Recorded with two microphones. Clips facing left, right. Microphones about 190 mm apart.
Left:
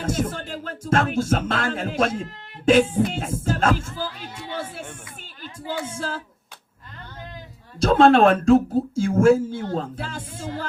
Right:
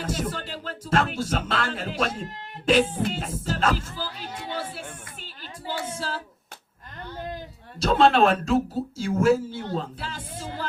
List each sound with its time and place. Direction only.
0.0 s music: 45° left (ahead or behind)
2.6 s speech: 50° left (ahead or behind)
5.4 s a sound: 50° left (ahead or behind)
7.8 s speech: 50° left (ahead or behind)